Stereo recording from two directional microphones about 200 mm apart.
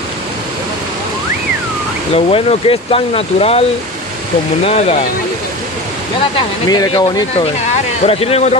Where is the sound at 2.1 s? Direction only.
30° left (ahead or behind).